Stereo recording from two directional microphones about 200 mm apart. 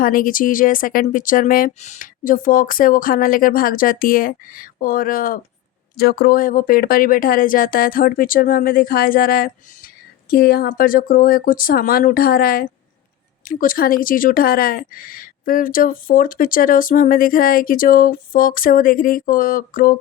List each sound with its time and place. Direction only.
0.0 s speech: 45° left (ahead or behind)